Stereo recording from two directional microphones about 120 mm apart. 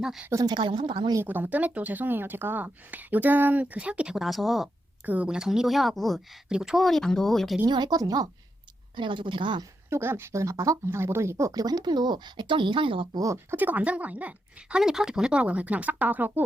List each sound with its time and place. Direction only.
0.0 s a woman's voice: 5° right (ahead or behind)
0.3 s speech: 25° right (ahead or behind)
0.5 s a woman's voice: 40° right (ahead or behind)
1.2 s speech: 15° right (ahead or behind)
5.0 s a woman's voice: 10° right (ahead or behind)
7.7 s a woman's voice: 35° right (ahead or behind)
9.0 s speech: 45° right (ahead or behind)
9.9 s speech: 20° right (ahead or behind); by 13.1 s 45° right (ahead or behind)
13.1 s speech: 25° right (ahead or behind)